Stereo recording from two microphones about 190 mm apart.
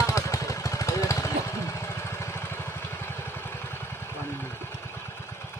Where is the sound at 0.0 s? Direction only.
15° left (ahead or behind).